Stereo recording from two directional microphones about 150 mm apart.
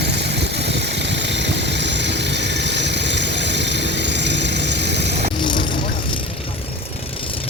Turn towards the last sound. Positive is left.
turn(degrees=30)  # may be behind; listen again after turning